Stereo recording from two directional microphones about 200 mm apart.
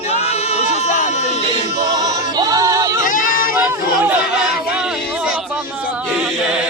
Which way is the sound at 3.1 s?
45° left (ahead or behind).